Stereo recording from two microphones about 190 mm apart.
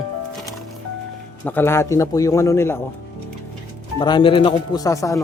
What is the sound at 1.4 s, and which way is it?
A man's voice, 10° left (ahead or behind).